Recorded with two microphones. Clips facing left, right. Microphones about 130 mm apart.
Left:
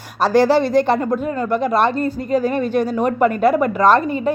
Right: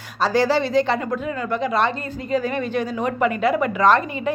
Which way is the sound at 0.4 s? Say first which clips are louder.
Left 4 dB; 45° left (ahead or behind).